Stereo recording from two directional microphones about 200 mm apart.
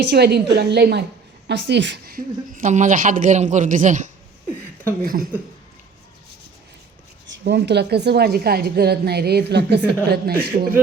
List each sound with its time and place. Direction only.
0.0 s a woman's voice: 55° right (ahead or behind)
7.4 s a woman's voice: 60° right (ahead or behind)